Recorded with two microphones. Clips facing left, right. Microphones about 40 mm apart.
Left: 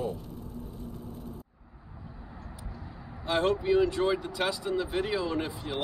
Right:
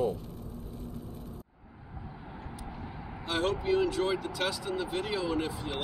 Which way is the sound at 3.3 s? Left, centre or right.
Centre.